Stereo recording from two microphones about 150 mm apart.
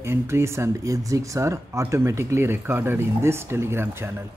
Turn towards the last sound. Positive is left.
turn(degrees=-15)  # may be behind; listen again after turning